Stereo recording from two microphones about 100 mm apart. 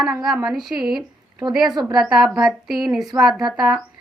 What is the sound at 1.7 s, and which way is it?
Speech, 45° right (ahead or behind).